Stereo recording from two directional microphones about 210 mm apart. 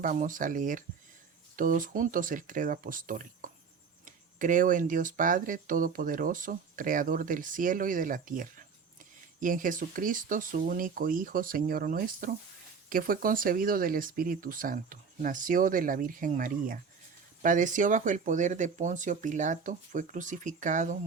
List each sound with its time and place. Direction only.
0.0 s speech: 40° right (ahead or behind)